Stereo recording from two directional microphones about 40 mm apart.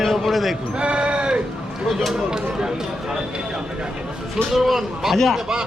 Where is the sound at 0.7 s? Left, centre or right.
Right.